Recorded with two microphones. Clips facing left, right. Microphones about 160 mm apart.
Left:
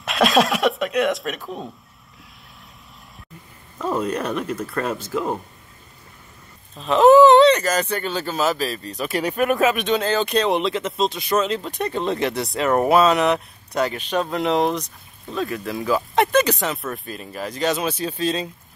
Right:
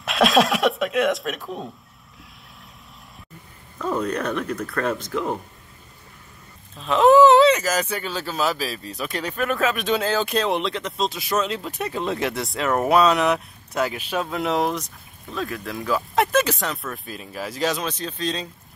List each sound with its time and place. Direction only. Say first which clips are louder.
0.0 s speech: even; centre (ahead or behind)
4.0 s speech: left 1 dB; 10° left (ahead or behind)
6.8 s speech: left 2 dB; centre (ahead or behind)
9.8 s speech: left 2 dB; 5° right (ahead or behind)